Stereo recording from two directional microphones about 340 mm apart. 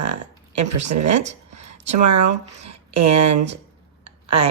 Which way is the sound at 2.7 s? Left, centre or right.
Centre.